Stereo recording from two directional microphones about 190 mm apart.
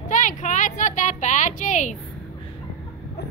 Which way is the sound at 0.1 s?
40° left (ahead or behind).